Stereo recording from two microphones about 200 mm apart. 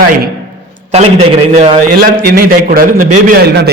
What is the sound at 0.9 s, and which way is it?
Speech, 30° right (ahead or behind).